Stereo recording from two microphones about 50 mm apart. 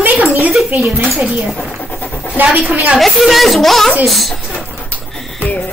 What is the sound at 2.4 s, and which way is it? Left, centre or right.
Speech, right.